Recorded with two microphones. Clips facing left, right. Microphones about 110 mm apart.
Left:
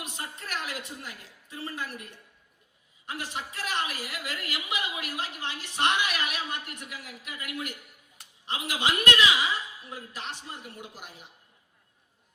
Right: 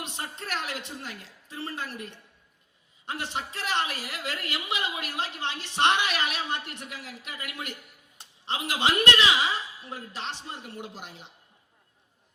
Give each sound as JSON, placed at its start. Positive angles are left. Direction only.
{"t": 0.0, "sound": "a woman's voice", "side_deg": -30}